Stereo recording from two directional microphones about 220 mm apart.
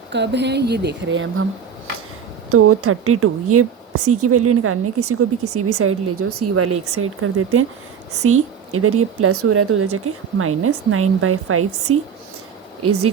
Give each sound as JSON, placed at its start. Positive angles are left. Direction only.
{"t": 0.1, "sound": "speech", "side_deg": -50}
{"t": 2.5, "sound": "a woman's voice", "side_deg": -80}